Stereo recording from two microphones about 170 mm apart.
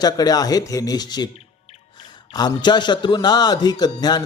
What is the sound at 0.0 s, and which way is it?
A man's voice, 20° left (ahead or behind).